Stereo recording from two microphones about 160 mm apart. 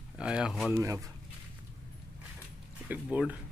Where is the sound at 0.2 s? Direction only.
5° right (ahead or behind).